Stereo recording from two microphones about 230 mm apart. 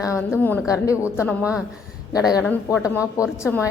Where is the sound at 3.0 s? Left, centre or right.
Centre.